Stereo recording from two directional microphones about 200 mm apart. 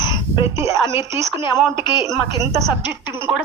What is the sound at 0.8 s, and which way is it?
Speech, 15° right (ahead or behind).